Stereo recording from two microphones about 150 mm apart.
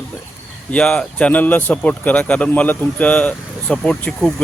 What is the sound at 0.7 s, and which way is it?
Speech, 5° left (ahead or behind).